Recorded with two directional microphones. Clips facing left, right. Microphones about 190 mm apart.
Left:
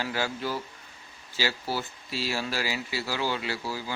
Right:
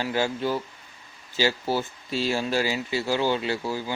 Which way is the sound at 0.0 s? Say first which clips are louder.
Right 5 dB; 20° right (ahead or behind).